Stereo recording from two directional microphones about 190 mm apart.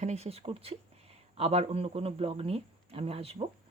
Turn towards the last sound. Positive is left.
turn(degrees=-30)  # may be behind; listen again after turning